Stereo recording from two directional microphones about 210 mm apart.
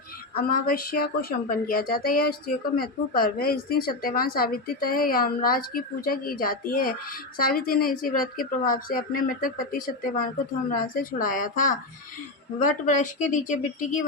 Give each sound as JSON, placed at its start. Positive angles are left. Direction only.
{"t": 0.3, "sound": "speech", "side_deg": 45}